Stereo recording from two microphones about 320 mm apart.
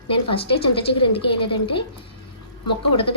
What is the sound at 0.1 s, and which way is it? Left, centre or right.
A woman's voice, centre.